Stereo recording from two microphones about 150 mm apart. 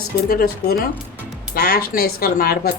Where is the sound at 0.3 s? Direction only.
85° left.